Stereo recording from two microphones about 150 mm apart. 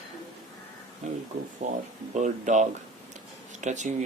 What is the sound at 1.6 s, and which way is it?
Speech, 50° right (ahead or behind).